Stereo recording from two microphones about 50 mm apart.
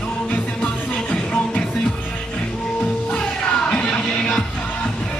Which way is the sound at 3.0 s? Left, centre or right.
Left.